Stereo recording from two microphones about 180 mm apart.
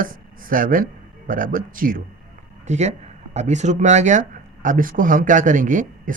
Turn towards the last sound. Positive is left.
turn(degrees=-45)  # may be behind; listen again after turning